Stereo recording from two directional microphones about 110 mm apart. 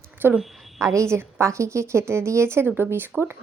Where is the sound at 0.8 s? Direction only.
30° right (ahead or behind).